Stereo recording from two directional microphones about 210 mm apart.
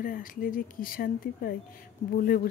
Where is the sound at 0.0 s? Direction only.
40° left (ahead or behind).